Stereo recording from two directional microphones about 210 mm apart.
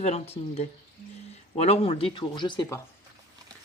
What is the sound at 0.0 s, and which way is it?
Speech, 30° left (ahead or behind).